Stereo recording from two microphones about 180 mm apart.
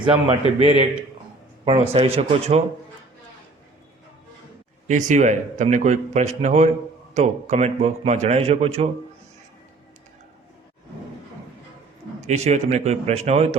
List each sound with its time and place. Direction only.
0.3 s speech: 35° right (ahead or behind)
4.9 s speech: 45° right (ahead or behind)
12.2 s speech: 40° right (ahead or behind)